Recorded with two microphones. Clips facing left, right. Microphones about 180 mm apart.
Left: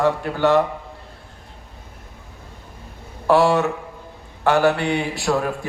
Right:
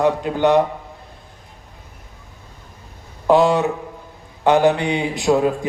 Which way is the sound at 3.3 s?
20° right (ahead or behind).